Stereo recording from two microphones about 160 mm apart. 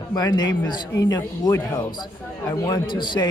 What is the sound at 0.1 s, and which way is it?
Speech, 25° left (ahead or behind).